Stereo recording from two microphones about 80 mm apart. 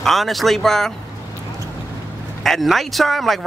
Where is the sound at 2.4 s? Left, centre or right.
Centre.